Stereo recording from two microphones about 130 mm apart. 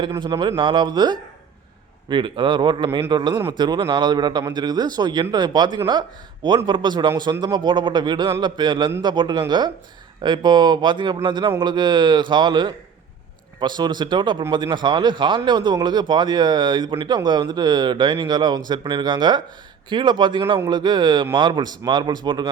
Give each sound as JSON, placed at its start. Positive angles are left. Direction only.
{"t": 0.2, "sound": "speech", "side_deg": -35}